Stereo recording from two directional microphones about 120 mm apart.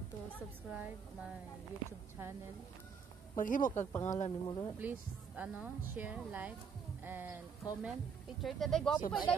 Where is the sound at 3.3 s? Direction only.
90° left.